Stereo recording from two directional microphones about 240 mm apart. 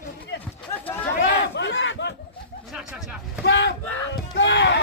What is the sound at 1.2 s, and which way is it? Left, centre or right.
Battle cry, left.